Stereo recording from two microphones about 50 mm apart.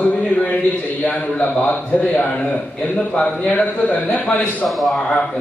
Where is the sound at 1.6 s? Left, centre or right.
Left.